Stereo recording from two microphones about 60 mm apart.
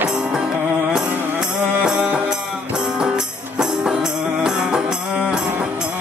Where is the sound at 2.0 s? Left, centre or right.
Right.